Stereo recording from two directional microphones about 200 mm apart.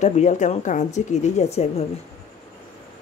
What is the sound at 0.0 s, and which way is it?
A woman's voice, 35° left (ahead or behind).